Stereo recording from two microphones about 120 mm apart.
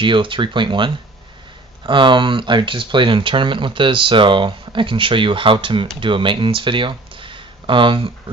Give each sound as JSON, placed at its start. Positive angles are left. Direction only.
{"t": 0.0, "sound": "speech", "side_deg": -45}
{"t": 1.9, "sound": "speech", "side_deg": -45}